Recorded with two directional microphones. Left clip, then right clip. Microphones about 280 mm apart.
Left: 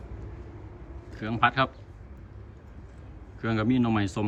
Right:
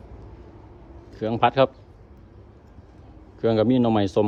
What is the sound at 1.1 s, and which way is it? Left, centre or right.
Speech, centre.